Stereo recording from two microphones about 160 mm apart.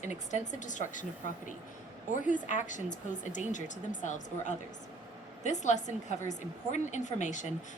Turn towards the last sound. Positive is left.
turn(degrees=50)  # may be behind; listen again after turning